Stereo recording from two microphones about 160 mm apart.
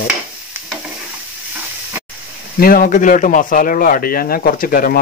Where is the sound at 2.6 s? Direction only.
65° left (ahead or behind).